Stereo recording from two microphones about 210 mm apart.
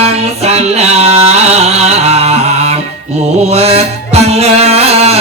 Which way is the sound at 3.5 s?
30° right (ahead or behind).